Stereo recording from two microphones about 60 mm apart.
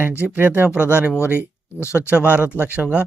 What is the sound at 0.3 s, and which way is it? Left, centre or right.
Speech, right.